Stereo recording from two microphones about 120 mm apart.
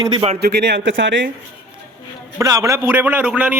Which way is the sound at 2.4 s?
30° right (ahead or behind).